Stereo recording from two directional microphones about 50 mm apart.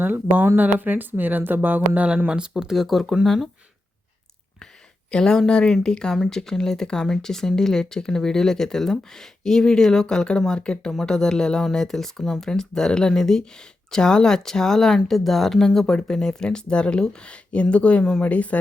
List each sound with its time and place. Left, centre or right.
0.0 s speech: right
2.3 s speech: centre
5.1 s speech: centre; by 18.5 s left